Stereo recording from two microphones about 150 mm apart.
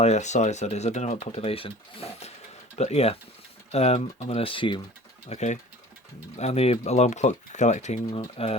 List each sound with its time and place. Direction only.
0.0 s speech: 50° left (ahead or behind); by 4.8 s 35° left (ahead or behind)
5.3 s speech: 50° left (ahead or behind)